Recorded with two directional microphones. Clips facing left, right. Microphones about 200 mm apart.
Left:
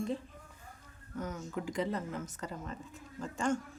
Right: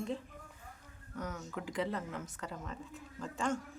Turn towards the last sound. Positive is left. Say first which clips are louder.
# left 3 dB
turn(degrees=0)  # may be behind; listen again after turning